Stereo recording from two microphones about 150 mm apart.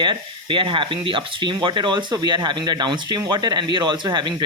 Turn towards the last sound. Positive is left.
turn(degrees=-30)  # may be behind; listen again after turning